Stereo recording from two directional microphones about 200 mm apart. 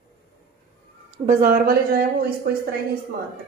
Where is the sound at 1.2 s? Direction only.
45° right (ahead or behind).